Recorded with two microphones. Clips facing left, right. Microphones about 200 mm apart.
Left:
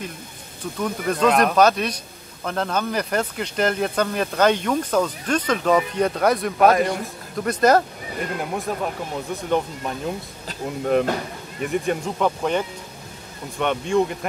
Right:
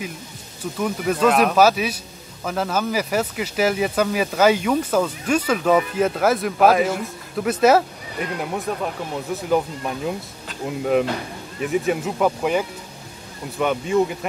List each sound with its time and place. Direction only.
0.7 s speech: 5° right (ahead or behind)